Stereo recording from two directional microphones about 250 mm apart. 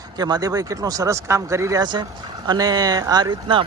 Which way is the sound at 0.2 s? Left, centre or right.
Centre.